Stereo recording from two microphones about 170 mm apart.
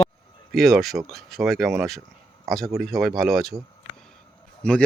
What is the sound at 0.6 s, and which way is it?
Speech, centre (ahead or behind).